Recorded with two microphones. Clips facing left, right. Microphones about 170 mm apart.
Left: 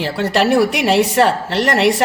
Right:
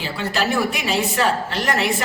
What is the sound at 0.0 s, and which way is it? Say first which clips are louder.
A woman's voice: left 7 dB; 70° left (ahead or behind).